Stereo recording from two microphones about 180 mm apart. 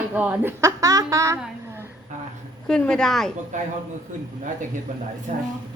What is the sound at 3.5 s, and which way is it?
Speech, 45° right (ahead or behind).